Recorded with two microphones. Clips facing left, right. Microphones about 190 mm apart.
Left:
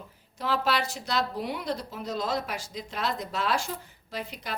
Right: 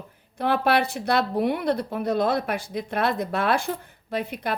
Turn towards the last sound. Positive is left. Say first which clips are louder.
# right 9 dB
turn(degrees=-55)  # may be behind; listen again after turning